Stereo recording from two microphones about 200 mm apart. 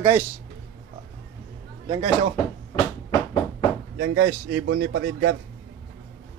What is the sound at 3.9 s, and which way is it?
Speech, 85° right.